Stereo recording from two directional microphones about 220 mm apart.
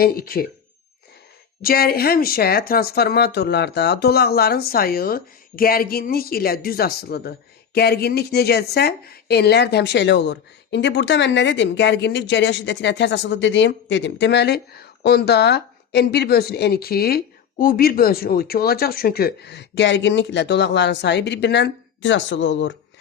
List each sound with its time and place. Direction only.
0.0 s speech: 45° left (ahead or behind)
1.6 s speech: 45° left (ahead or behind)